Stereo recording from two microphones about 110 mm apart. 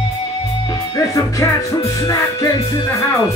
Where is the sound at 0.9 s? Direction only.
30° left (ahead or behind).